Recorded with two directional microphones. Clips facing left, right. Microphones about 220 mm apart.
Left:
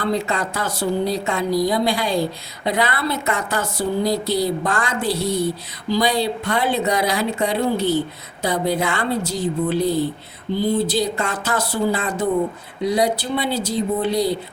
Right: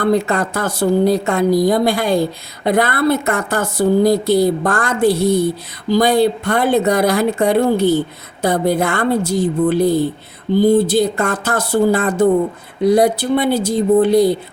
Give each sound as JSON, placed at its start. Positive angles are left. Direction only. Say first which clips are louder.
{"t": 0.0, "sound": "speech", "louder": "right 6 dB", "side_deg": -50}